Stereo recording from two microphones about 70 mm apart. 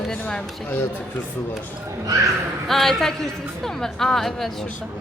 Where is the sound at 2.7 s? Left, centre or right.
Centre.